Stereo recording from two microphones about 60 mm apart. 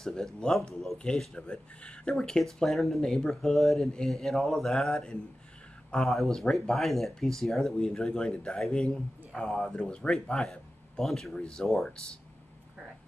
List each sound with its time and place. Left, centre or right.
0.0 s speech: centre
0.9 s speech: centre
2.6 s speech: centre